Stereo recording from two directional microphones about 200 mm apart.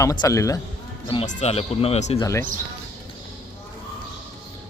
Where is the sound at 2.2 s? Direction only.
15° left (ahead or behind).